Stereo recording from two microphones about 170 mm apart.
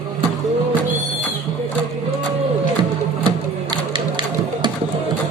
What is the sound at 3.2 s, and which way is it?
Typewriter, 30° right (ahead or behind).